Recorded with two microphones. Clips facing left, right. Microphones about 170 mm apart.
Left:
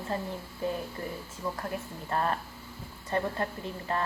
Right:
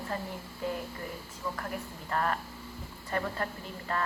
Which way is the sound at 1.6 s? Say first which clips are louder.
Left 2 dB; 25° left (ahead or behind).